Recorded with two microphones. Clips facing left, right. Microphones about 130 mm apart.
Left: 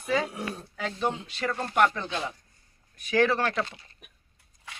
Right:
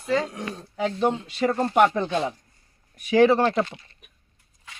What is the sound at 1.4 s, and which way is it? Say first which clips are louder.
Speech: right 5 dB; 30° right (ahead or behind).